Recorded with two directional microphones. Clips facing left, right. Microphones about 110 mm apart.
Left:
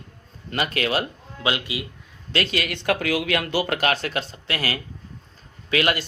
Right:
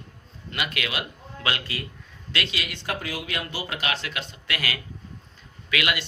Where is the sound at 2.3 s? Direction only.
45° left (ahead or behind).